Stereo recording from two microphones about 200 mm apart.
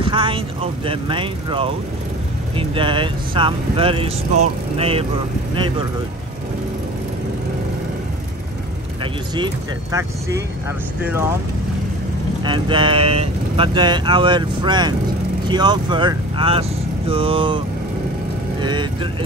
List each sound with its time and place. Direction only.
0.0 s speech: 25° right (ahead or behind)
9.0 s speech: 20° right (ahead or behind)
12.4 s speech: 25° right (ahead or behind)
18.6 s speech: 20° right (ahead or behind)